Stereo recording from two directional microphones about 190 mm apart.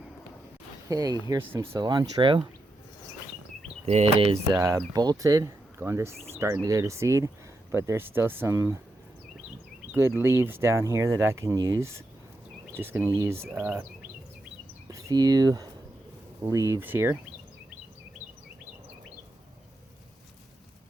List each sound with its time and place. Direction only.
0.9 s speech: 20° right (ahead or behind)
3.8 s speech: 35° right (ahead or behind)
4.9 s speech: 20° right (ahead or behind)
10.2 s speech: 15° right (ahead or behind)
15.0 s speech: 20° right (ahead or behind)